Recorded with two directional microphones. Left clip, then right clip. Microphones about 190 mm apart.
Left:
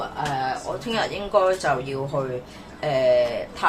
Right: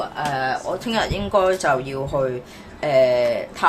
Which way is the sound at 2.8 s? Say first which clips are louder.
Right 3 dB; 40° right (ahead or behind).